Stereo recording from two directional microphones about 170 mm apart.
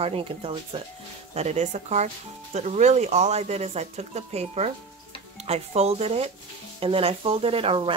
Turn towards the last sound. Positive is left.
turn(degrees=-35)  # may be behind; listen again after turning